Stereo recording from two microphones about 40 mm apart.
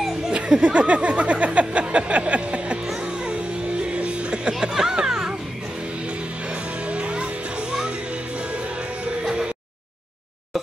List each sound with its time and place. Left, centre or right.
0.3 s speech: right
3.8 s music: right
6.9 s music: right
9.2 s music: centre